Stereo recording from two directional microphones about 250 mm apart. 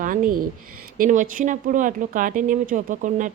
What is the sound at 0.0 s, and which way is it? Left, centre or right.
Speech, right.